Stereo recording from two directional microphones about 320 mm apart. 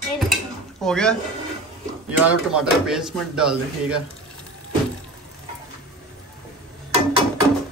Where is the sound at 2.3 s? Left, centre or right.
Centre.